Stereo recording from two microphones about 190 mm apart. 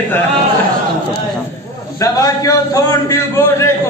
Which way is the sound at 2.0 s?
15° left (ahead or behind).